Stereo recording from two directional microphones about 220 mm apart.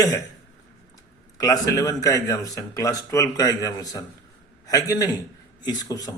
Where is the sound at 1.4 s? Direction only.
15° left (ahead or behind).